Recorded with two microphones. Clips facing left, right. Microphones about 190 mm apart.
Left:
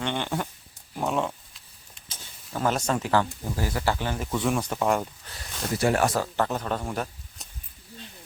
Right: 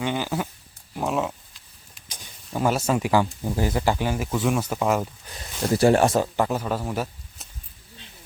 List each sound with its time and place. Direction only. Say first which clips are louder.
0.0 s sheep: right 3 dB; 5° right (ahead or behind)
0.9 s a sound: right 1 dB; centre (ahead or behind)
2.0 s speech: right 3 dB; 15° right (ahead or behind)
5.7 s speech: right 5 dB; 30° right (ahead or behind)
6.3 s a man's voice: right 3 dB; 10° right (ahead or behind)